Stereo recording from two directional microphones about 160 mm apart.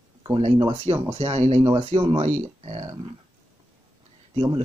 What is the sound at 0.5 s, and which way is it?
Speech, 25° right (ahead or behind).